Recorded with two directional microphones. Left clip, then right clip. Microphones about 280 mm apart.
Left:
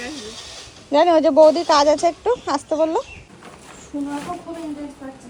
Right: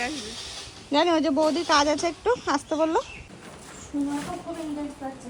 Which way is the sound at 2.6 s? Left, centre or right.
Centre.